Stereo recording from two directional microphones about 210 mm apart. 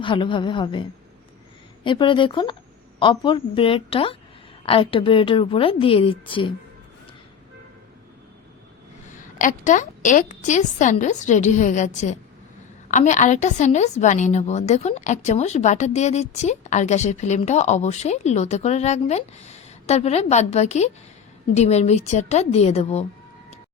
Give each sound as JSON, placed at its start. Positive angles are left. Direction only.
{"t": 0.0, "sound": "a woman's voice", "side_deg": 25}
{"t": 9.1, "sound": "a woman's voice", "side_deg": 35}